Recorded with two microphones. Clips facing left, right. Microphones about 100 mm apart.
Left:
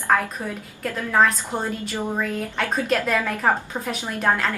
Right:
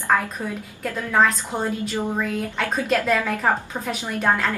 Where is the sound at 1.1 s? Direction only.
Centre (ahead or behind).